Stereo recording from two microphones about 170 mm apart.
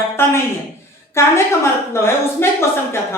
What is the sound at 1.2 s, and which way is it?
A woman's voice, 15° left (ahead or behind).